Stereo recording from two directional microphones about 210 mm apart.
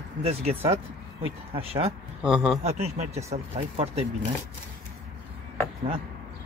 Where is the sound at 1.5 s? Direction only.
30° right (ahead or behind).